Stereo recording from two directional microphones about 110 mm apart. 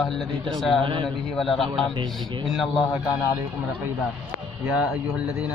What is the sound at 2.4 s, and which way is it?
Speech, centre (ahead or behind).